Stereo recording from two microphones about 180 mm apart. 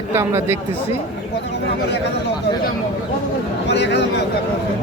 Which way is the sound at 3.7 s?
75° left (ahead or behind).